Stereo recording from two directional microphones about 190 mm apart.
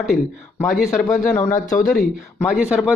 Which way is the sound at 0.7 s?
Centre (ahead or behind).